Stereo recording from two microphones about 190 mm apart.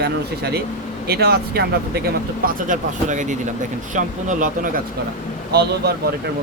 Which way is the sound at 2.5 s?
45° right (ahead or behind).